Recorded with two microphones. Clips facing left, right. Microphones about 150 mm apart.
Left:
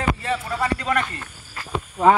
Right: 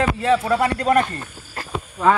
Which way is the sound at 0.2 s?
80° right.